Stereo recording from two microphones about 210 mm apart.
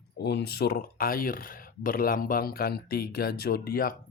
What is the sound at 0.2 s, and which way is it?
Speech, 50° left (ahead or behind).